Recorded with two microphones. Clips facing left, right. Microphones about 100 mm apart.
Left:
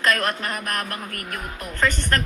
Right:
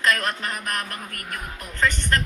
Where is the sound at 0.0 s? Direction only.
50° left (ahead or behind).